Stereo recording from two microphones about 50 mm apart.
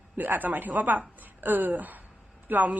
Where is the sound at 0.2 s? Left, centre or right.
Right.